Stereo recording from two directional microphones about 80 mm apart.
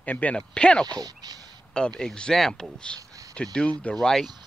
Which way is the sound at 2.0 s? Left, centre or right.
Centre.